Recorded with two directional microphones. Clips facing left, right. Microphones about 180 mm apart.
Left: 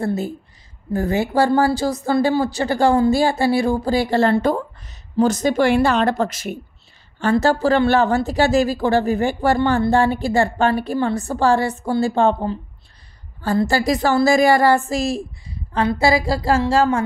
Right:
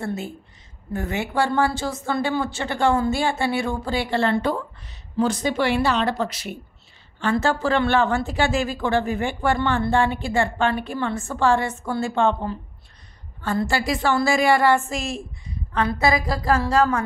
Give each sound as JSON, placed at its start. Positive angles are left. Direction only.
{"t": 0.0, "sound": "a woman's voice", "side_deg": 35}